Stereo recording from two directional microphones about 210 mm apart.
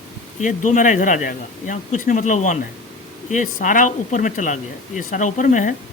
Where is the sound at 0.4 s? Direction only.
35° left (ahead or behind).